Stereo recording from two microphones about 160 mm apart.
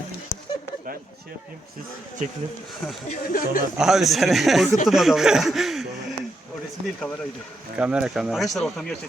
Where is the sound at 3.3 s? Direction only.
60° left (ahead or behind).